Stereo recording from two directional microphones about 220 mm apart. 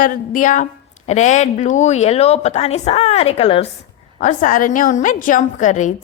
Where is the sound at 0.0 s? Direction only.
35° left (ahead or behind).